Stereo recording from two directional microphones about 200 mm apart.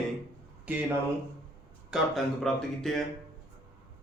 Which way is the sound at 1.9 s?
Centre (ahead or behind).